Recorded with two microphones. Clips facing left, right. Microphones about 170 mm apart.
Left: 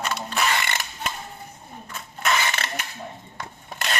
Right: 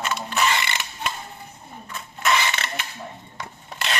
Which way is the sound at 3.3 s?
50° left (ahead or behind).